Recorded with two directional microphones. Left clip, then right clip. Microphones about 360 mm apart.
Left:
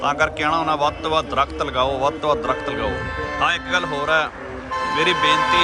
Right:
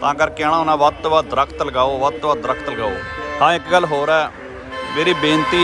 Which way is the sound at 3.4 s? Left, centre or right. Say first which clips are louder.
Right 6 dB; centre.